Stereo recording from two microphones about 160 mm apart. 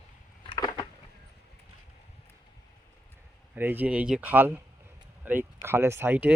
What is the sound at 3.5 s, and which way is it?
Speech, 10° right (ahead or behind).